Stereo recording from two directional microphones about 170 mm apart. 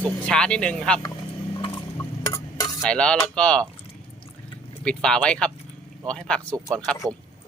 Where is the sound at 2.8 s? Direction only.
5° left (ahead or behind).